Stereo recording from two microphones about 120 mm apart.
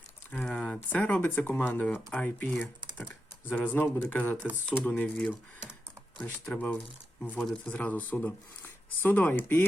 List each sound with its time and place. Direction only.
0.4 s speech: 5° left (ahead or behind)